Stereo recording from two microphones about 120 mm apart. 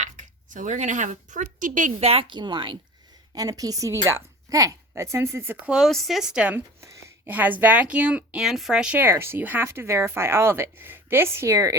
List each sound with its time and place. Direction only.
0.0 s speech: 90° right; by 2.7 s 40° right (ahead or behind)
3.3 s a woman's voice: 30° right (ahead or behind)
5.6 s a woman's voice: 5° right (ahead or behind); by 11.8 s 25° right (ahead or behind)